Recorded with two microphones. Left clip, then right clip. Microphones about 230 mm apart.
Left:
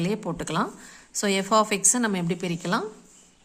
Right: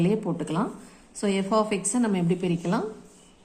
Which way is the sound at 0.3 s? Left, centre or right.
Left.